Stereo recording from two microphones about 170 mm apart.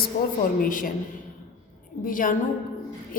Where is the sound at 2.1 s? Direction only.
50° left (ahead or behind).